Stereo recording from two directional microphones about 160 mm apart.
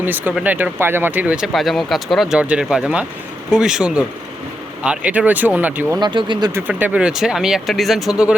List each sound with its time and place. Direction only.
0.0 s speech: 10° right (ahead or behind)
6.0 s speech: 30° right (ahead or behind)
6.5 s speech: 10° right (ahead or behind)